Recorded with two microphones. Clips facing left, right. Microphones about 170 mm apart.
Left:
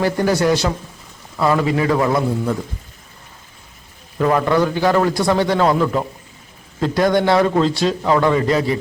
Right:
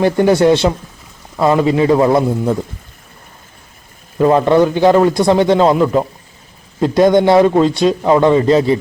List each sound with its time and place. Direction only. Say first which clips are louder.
0.0 s a man's voice: right 6 dB; 25° right (ahead or behind)
4.2 s a man's voice: right 6 dB; 25° right (ahead or behind)